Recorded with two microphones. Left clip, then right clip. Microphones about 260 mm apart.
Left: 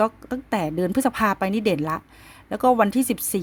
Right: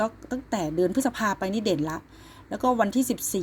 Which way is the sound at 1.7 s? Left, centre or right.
Left.